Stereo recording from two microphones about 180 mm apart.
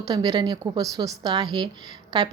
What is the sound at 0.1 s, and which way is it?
A woman's voice, 20° right (ahead or behind).